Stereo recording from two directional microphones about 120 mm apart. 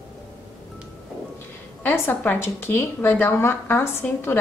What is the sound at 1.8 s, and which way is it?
A woman's voice, 15° left (ahead or behind).